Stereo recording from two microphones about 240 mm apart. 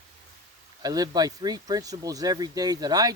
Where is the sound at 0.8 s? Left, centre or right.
Centre.